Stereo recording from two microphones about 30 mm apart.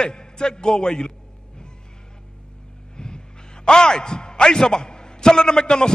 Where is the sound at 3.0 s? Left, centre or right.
Left.